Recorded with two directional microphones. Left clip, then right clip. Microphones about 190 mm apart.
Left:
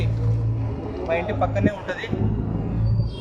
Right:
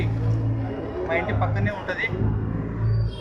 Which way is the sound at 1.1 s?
15° left (ahead or behind).